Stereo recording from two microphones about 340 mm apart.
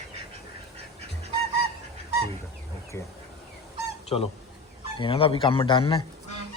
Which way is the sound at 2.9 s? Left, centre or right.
Centre.